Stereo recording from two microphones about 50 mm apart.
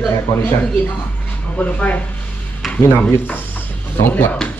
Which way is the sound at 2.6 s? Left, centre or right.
Centre.